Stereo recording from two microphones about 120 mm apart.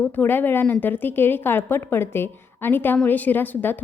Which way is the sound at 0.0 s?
15° left (ahead or behind).